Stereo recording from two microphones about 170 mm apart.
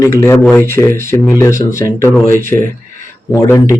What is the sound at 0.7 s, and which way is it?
Speech, 15° left (ahead or behind).